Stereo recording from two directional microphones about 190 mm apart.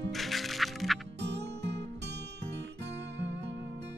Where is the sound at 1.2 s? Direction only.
65° right (ahead or behind).